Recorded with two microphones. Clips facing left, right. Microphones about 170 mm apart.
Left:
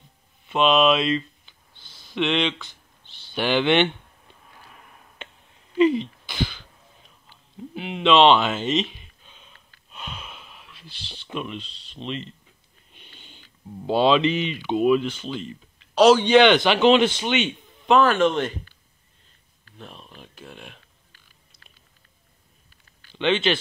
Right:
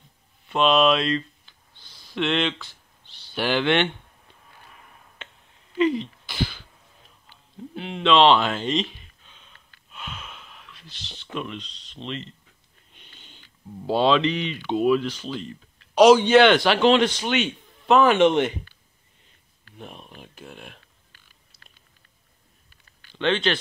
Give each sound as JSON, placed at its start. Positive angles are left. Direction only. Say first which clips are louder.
{"t": 0.5, "sound": "speech", "louder": "left 1 dB", "side_deg": 0}
{"t": 5.9, "sound": "throat clearing", "louder": "left 1 dB", "side_deg": 0}
{"t": 7.7, "sound": "speech", "louder": "left 1 dB", "side_deg": 5}
{"t": 10.1, "sound": "a sound", "louder": "left 1 dB", "side_deg": 10}
{"t": 11.1, "sound": "speech", "louder": "left 1 dB", "side_deg": 10}
{"t": 13.8, "sound": "speech", "louder": "left 1 dB", "side_deg": 5}
{"t": 15.9, "sound": "a man's voice", "louder": "right 1 dB", "side_deg": -10}
{"t": 18.0, "sound": "speech", "louder": "right 2 dB", "side_deg": -20}
{"t": 19.8, "sound": "speech", "louder": "right 2 dB", "side_deg": -10}
{"t": 23.1, "sound": "speech", "louder": "left 1 dB", "side_deg": 5}